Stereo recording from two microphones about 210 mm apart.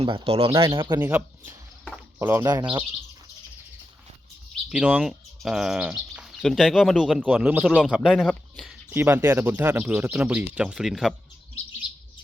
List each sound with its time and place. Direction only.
0.0 s speech: 25° right (ahead or behind)
4.7 s speech: 5° right (ahead or behind)
8.9 s speech: 10° right (ahead or behind)